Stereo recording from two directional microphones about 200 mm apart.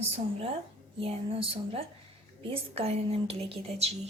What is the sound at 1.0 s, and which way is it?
Speech, 30° right (ahead or behind).